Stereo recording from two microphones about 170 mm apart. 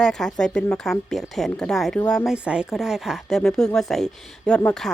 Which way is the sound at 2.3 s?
5° right (ahead or behind).